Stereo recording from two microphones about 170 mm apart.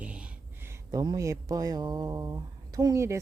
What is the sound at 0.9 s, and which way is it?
Speech, 20° right (ahead or behind).